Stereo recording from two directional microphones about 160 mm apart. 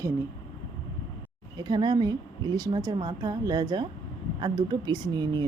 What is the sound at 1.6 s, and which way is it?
Speech, 25° right (ahead or behind).